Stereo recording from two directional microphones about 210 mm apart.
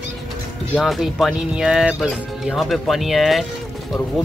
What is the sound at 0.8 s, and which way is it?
Speech, centre (ahead or behind).